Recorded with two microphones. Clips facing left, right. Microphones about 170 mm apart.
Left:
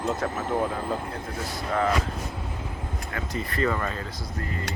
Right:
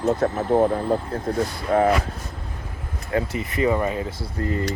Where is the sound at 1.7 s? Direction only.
50° right (ahead or behind).